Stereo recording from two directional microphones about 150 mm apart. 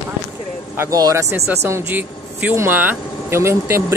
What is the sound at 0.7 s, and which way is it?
Speech, 25° right (ahead or behind).